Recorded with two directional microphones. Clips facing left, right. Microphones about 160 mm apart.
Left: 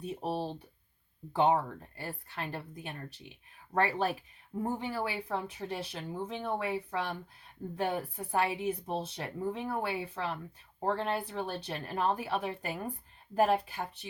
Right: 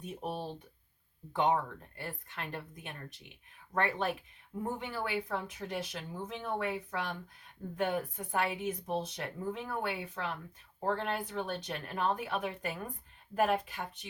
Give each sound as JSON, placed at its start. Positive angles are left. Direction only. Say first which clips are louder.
{"t": 0.0, "sound": "speech", "louder": "left 4 dB", "side_deg": 35}